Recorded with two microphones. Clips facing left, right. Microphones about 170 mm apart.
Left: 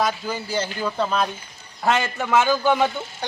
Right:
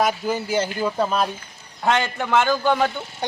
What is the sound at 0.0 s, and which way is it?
Speech, 15° right (ahead or behind).